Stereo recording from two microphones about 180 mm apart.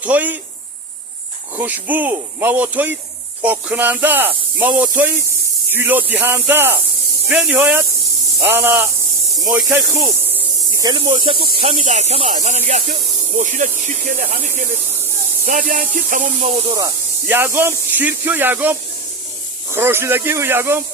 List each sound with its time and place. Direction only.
0.0 s speech: 10° right (ahead or behind)
1.5 s speech: 10° right (ahead or behind); by 11.3 s 25° right (ahead or behind)
11.6 s speech: 40° right (ahead or behind)
15.4 s speech: 45° right (ahead or behind)
16.7 s speech: 15° right (ahead or behind)